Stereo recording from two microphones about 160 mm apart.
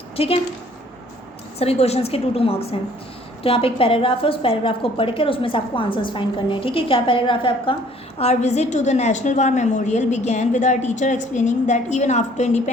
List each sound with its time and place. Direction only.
0.2 s a woman's voice: 35° left (ahead or behind)
1.5 s a woman's voice: 40° left (ahead or behind)
8.2 s a woman's voice: 40° left (ahead or behind)